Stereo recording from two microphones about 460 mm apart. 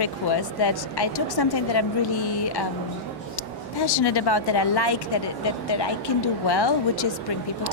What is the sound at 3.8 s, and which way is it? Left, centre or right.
A woman's voice, left.